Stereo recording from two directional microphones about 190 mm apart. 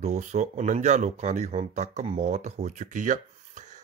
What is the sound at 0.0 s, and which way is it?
A man's voice, 35° right (ahead or behind).